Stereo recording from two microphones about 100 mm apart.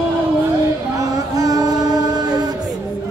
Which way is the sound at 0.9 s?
35° right (ahead or behind).